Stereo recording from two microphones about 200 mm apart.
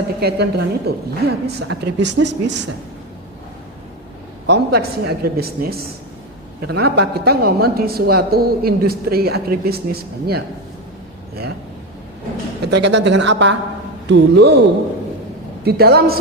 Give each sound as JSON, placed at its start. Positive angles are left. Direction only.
{"t": 0.2, "sound": "speech", "side_deg": -55}
{"t": 4.4, "sound": "speech", "side_deg": -55}
{"t": 12.7, "sound": "speech", "side_deg": -60}
{"t": 15.6, "sound": "speech", "side_deg": -50}